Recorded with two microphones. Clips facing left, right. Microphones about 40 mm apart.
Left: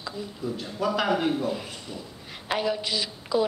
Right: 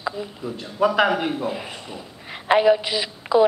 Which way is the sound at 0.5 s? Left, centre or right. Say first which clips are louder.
Even; centre.